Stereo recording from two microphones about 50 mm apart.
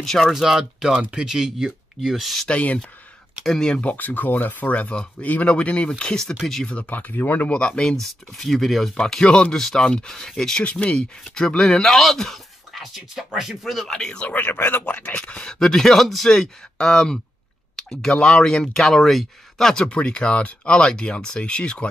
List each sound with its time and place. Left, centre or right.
0.0 s speech: centre
0.3 s speech: centre
2.4 s speech: left
3.4 s speech: centre
3.9 s speech: left; by 6.7 s centre
6.7 s speech: left
7.5 s speech: centre
8.9 s speech: centre
12.8 s speech: centre
13.8 s speech: centre
14.2 s speech: left; by 17.2 s centre
17.7 s clicking: centre
18.3 s speech: centre
19.7 s speech: centre